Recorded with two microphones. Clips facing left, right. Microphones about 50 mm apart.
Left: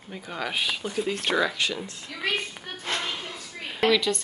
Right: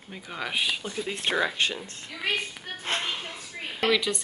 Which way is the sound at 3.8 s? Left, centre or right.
Centre.